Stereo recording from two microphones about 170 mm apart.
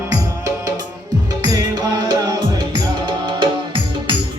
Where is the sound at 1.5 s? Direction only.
20° right (ahead or behind).